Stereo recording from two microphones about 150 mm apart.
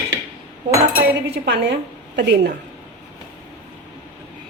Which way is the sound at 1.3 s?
90° right.